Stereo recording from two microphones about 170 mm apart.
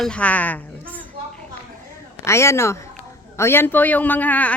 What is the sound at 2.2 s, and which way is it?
A man's voice, 15° left (ahead or behind).